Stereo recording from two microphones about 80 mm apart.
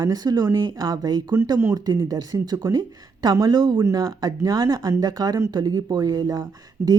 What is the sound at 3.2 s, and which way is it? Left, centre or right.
Speech, right.